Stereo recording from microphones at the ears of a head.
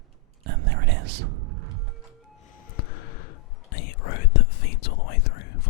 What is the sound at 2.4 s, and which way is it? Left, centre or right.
Whispering, left.